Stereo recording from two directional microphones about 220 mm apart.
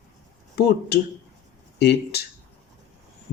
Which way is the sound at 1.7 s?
50° left (ahead or behind).